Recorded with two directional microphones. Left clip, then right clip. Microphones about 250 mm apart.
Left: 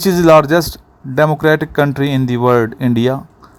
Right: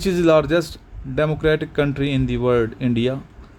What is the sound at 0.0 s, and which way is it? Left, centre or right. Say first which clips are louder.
Speech: left 7 dB; left.